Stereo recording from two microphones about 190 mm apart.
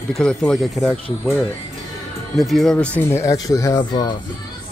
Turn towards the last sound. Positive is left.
turn(degrees=20)  # may be behind; listen again after turning